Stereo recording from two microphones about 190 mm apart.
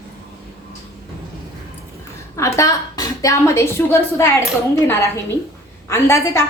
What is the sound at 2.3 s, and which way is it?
A woman's voice, 15° left (ahead or behind).